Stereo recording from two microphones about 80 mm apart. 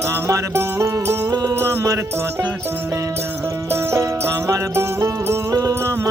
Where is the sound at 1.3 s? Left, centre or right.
Right.